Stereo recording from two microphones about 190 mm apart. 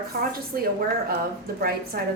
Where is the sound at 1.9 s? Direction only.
55° right (ahead or behind).